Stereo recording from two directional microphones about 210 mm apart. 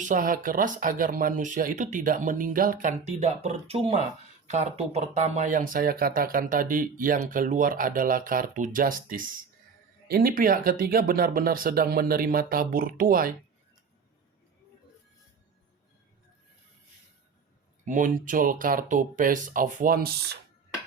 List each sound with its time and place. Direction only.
0.0 s speech: 40° right (ahead or behind)
17.8 s speech: 40° right (ahead or behind)